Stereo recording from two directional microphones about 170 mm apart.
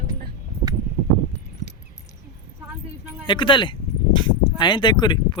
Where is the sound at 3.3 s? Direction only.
30° left (ahead or behind).